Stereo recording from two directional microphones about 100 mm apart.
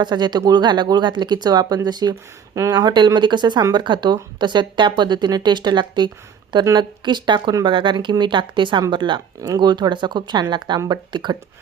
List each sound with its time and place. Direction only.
0.0 s speech: 45° right (ahead or behind)
10.8 s speech: 35° right (ahead or behind)
11.1 s speech: 50° right (ahead or behind)